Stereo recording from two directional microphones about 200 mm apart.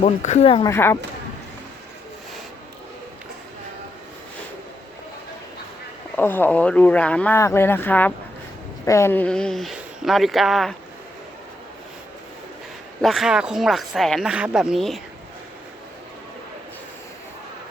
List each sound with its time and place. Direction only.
0.0 s speech: 35° left (ahead or behind)
0.7 s speech: 10° left (ahead or behind)
6.1 s speech: 10° left (ahead or behind)
13.0 s speech: centre (ahead or behind)